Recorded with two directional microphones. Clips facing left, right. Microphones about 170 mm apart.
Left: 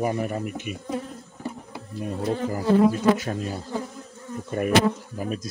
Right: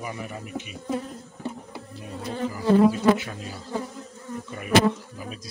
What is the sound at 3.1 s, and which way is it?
Bee, 40° left (ahead or behind).